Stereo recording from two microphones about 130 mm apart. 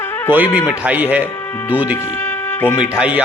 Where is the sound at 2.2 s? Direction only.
15° left (ahead or behind).